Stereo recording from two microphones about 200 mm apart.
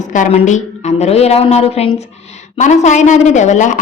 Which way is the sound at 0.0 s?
40° left (ahead or behind).